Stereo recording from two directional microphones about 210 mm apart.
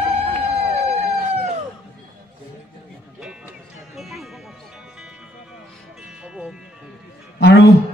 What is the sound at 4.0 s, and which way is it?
Music, centre (ahead or behind).